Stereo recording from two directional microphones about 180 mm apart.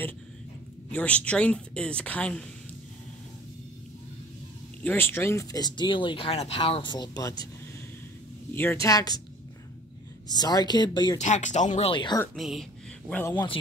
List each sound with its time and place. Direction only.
0.9 s a woman's voice: 5° left (ahead or behind)
4.8 s speech: 10° left (ahead or behind)
8.8 s speech: 20° left (ahead or behind)
10.2 s speech: 25° left (ahead or behind)
11.1 s speech: 40° left (ahead or behind)
11.9 s speech: 25° left (ahead or behind)
12.4 s speech: centre (ahead or behind)
13.3 s speech: 25° left (ahead or behind)